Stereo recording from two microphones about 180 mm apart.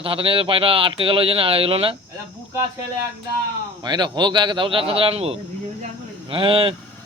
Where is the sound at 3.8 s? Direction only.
25° right (ahead or behind).